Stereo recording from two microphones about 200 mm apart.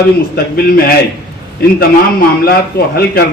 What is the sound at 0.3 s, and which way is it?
A man's voice, 50° left (ahead or behind).